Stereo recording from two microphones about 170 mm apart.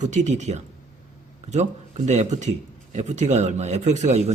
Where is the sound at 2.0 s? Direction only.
45° right (ahead or behind).